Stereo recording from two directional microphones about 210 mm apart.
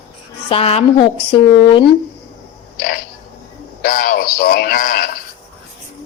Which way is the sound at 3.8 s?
40° left (ahead or behind).